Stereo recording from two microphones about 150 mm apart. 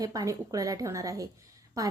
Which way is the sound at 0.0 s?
25° right (ahead or behind).